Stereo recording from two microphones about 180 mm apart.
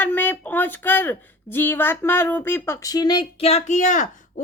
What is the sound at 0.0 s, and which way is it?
Speech, 10° left (ahead or behind).